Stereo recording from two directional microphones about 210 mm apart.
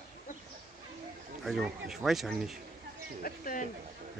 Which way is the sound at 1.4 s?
Centre (ahead or behind).